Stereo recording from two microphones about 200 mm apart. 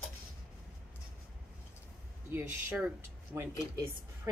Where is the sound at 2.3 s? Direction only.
10° right (ahead or behind).